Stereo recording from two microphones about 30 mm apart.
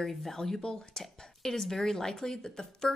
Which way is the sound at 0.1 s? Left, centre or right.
Centre.